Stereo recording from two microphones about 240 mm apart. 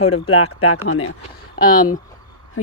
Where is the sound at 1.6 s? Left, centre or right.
Left.